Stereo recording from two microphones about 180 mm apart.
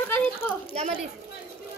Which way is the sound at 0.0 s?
10° left (ahead or behind).